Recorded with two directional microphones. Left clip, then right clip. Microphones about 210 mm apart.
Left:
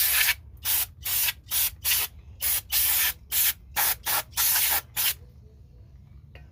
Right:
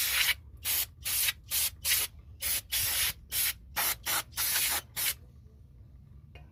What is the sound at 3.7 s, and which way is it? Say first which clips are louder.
Spray: left 4 dB; 5° left (ahead or behind).